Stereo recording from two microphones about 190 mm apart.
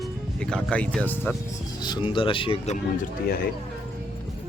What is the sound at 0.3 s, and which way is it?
Speech, 5° left (ahead or behind).